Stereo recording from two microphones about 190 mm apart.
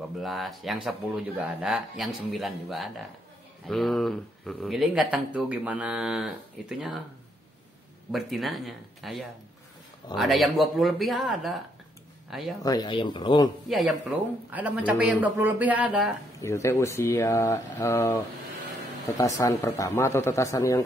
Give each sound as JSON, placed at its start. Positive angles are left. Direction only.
{"t": 0.2, "sound": "speech", "side_deg": 0}
{"t": 8.1, "sound": "speech", "side_deg": 0}
{"t": 12.6, "sound": "speech", "side_deg": 20}
{"t": 13.7, "sound": "a man's voice", "side_deg": -5}
{"t": 16.3, "sound": "speech", "side_deg": 15}